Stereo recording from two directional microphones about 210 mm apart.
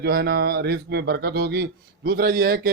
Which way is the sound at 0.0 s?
50° right (ahead or behind).